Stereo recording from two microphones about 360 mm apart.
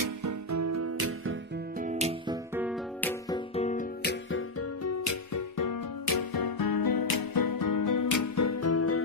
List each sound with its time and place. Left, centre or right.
0.0 s music: right
1.8 s music: centre
2.5 s music: centre; by 9.0 s left